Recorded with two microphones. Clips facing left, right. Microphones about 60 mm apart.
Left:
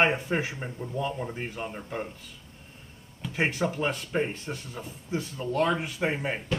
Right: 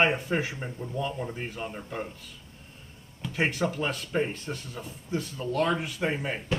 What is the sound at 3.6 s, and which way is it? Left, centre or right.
Speech, left.